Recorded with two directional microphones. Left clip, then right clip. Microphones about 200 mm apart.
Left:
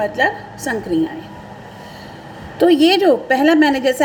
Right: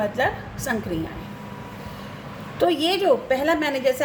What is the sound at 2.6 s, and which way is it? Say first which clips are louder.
A woman's voice: left 8 dB; 40° left (ahead or behind).